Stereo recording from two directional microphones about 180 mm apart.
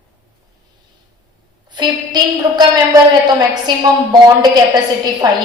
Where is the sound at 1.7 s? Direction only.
25° right (ahead or behind).